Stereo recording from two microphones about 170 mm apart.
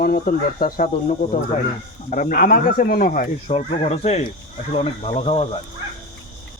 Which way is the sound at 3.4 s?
40° left (ahead or behind).